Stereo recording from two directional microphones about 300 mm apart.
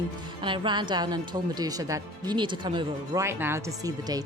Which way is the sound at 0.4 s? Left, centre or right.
Centre.